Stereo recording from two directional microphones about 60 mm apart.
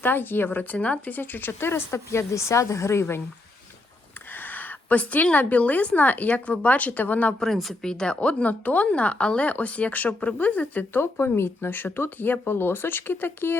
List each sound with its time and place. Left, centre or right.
0.0 s speech: left
1.5 s speech: left
2.0 s speech: left
4.3 s a woman's voice: left
7.3 s a woman's voice: centre; by 11.0 s left
11.3 s speech: left